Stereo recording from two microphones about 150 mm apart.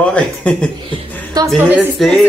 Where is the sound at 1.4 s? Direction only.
25° right (ahead or behind).